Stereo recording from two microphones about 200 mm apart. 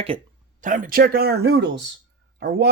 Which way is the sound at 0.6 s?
40° right (ahead or behind).